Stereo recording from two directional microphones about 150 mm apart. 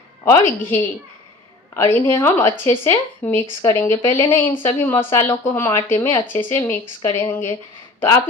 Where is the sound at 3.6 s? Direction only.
20° left (ahead or behind).